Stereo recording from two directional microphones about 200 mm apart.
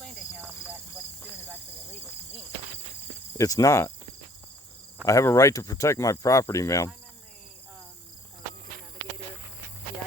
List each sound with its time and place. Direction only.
0.0 s cricket: 5° left (ahead or behind)
3.3 s speech: 15° left (ahead or behind)
5.0 s speech: 15° left (ahead or behind)